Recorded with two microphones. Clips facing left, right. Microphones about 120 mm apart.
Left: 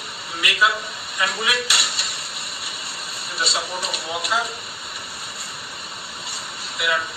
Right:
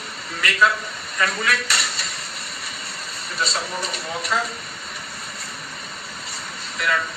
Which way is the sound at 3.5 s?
5° left (ahead or behind).